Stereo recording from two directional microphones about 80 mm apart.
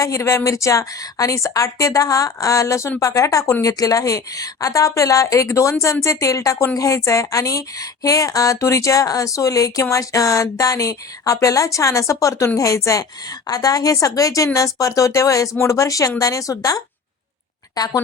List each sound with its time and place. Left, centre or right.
0.0 s a woman's voice: left